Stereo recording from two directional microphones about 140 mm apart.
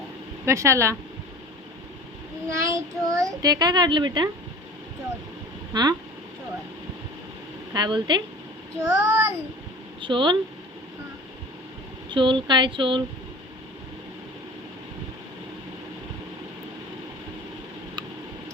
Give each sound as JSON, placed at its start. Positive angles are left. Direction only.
{"t": 0.4, "sound": "a child's voice", "side_deg": -20}
{"t": 2.5, "sound": "a child's voice", "side_deg": -25}
{"t": 5.7, "sound": "a child's voice", "side_deg": -30}
{"t": 7.7, "sound": "speech", "side_deg": -35}
{"t": 8.8, "sound": "a child's voice", "side_deg": -20}
{"t": 10.0, "sound": "speech", "side_deg": -35}
{"t": 12.0, "sound": "speech", "side_deg": -35}